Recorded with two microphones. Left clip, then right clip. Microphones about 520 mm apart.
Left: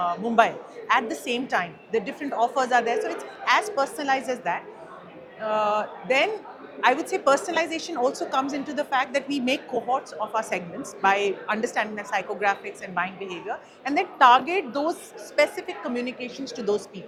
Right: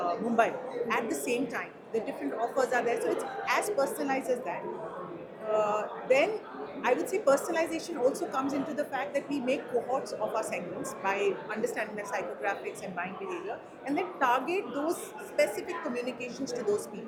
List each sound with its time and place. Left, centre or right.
0.3 s a woman's voice: left
13.8 s a woman's voice: left